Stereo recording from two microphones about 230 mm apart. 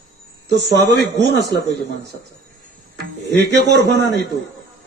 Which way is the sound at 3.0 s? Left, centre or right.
Right.